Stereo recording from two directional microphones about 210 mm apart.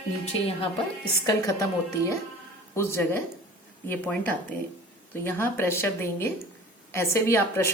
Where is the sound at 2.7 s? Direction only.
10° left (ahead or behind).